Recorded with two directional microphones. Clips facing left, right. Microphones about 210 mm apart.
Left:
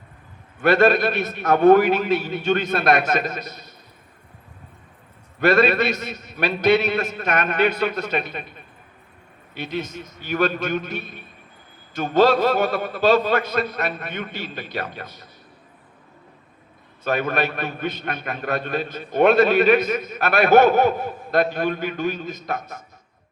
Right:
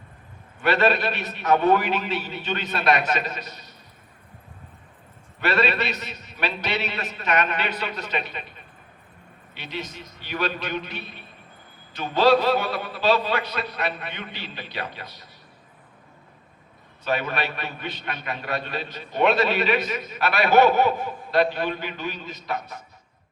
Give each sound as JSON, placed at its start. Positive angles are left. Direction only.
{"t": 0.6, "sound": "a man's voice", "side_deg": 45}
{"t": 5.4, "sound": "a man's voice", "side_deg": 45}
{"t": 9.6, "sound": "a man's voice", "side_deg": 45}
{"t": 17.0, "sound": "a man's voice", "side_deg": 45}